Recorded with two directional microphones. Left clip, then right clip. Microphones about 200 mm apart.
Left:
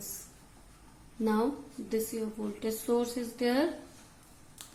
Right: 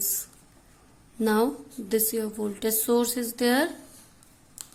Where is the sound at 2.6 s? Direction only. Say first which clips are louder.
Right 6 dB; 55° right (ahead or behind).